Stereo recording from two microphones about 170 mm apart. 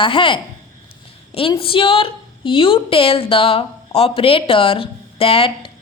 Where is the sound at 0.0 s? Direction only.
30° left (ahead or behind).